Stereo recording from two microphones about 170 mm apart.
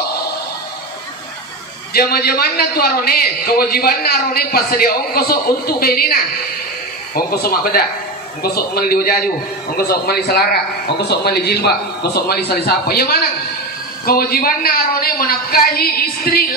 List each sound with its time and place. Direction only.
2.0 s a man's voice: 65° left (ahead or behind)